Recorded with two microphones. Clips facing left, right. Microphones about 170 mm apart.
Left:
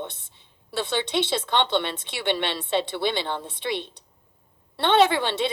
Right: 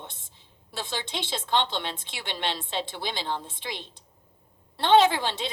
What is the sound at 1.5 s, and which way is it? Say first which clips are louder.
A woman's voice: left 2 dB; 65° left (ahead or behind).